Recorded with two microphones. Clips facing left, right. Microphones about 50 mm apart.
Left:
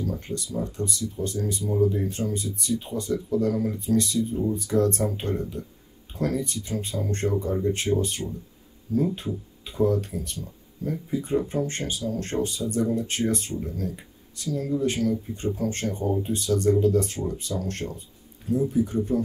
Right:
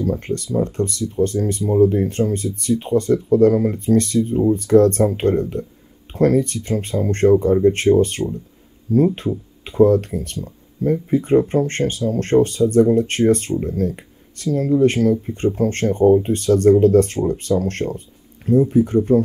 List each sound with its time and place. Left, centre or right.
0.0 s speech: right